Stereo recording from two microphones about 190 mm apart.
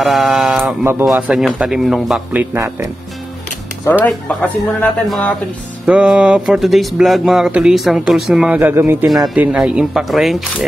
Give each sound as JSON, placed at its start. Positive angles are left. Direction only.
{"t": 0.0, "sound": "speech", "side_deg": 0}
{"t": 2.5, "sound": "speech", "side_deg": -15}
{"t": 4.0, "sound": "speech", "side_deg": 5}